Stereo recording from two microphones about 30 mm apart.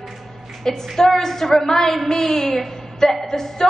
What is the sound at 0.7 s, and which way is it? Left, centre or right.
A woman's voice, centre.